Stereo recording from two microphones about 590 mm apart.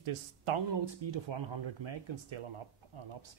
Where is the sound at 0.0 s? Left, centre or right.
Right.